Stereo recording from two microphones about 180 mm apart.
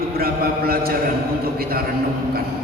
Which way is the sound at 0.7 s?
55° right (ahead or behind).